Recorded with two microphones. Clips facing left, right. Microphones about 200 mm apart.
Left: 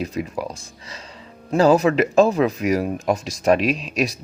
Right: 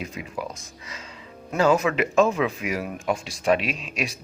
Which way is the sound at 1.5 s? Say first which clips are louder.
Left 5 dB; 35° left (ahead or behind).